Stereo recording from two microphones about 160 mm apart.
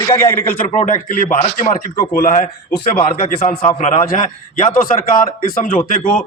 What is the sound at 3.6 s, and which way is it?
A man's voice, 45° left (ahead or behind).